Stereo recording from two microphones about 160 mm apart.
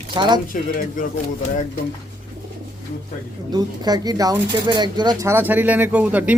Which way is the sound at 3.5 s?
25° right (ahead or behind).